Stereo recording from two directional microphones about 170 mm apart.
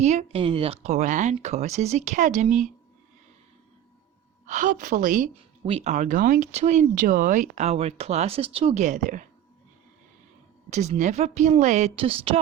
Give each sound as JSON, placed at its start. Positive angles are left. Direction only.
{"t": 0.0, "sound": "speech", "side_deg": -40}
{"t": 4.4, "sound": "a woman's voice", "side_deg": -45}
{"t": 5.3, "sound": "speech", "side_deg": -35}
{"t": 10.7, "sound": "speech", "side_deg": -40}